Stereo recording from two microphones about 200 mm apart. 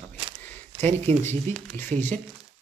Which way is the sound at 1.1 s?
10° left (ahead or behind).